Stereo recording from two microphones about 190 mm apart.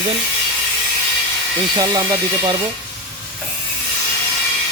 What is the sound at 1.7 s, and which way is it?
Speech, 20° right (ahead or behind).